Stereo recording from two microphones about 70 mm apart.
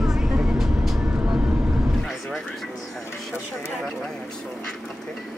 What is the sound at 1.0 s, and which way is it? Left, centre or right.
Vehicle, right.